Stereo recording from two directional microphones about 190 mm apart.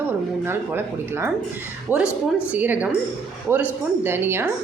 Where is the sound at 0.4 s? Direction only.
10° right (ahead or behind).